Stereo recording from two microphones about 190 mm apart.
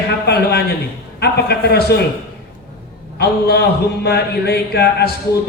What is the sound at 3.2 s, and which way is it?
A man's voice, 55° left (ahead or behind).